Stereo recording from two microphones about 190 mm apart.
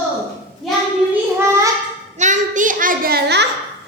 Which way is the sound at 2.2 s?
40° right (ahead or behind).